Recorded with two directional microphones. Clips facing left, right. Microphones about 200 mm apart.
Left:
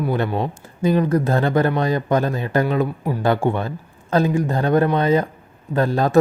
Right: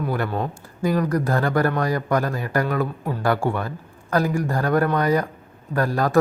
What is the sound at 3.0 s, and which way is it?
A man's voice, 10° left (ahead or behind).